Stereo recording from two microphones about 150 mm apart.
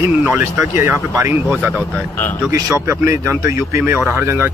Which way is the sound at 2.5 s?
20° right (ahead or behind).